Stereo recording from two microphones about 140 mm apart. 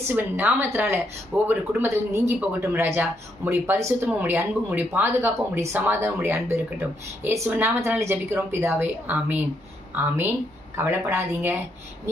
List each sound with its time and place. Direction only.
0.1 s speech: 15° right (ahead or behind)
10.8 s speech: 15° right (ahead or behind)